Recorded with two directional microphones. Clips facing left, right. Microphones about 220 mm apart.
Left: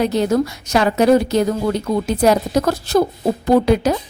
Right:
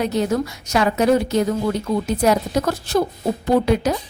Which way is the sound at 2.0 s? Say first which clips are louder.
Left 4 dB; 35° left (ahead or behind).